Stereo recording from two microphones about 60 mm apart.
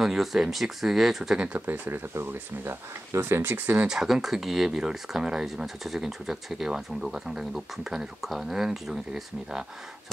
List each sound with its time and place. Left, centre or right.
0.0 s speech: centre
1.3 s speech: centre
1.7 s speech: right
3.5 s speech: right
3.8 s speech: centre